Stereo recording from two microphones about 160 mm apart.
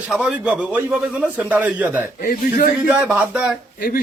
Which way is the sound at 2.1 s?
60° left (ahead or behind).